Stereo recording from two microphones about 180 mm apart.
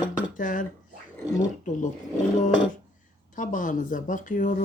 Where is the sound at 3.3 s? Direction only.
45° left (ahead or behind).